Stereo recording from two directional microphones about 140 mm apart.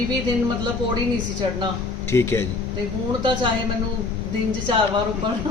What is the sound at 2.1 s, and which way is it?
Speech, 15° left (ahead or behind).